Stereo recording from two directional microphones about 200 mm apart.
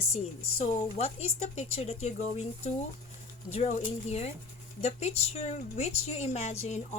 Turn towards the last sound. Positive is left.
turn(degrees=35)  # may be behind; listen again after turning